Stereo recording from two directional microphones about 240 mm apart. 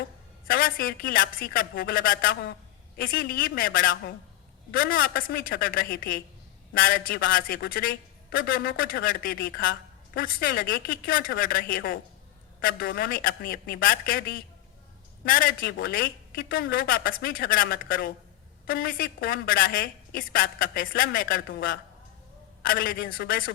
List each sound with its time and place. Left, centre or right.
0.4 s a woman's voice: left